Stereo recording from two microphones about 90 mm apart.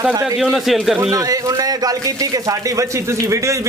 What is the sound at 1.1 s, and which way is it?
A man's voice, 40° right (ahead or behind).